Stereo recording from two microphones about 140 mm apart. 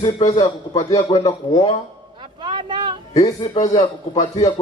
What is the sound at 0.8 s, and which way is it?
Speech, 25° left (ahead or behind).